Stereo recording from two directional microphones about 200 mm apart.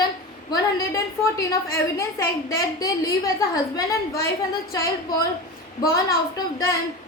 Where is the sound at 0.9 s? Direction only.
15° left (ahead or behind).